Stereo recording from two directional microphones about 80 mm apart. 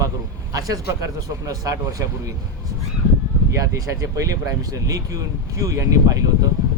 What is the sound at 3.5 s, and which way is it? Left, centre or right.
Speech, right.